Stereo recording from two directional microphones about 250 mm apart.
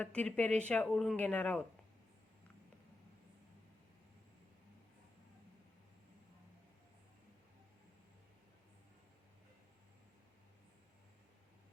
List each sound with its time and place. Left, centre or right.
0.0 s speech: centre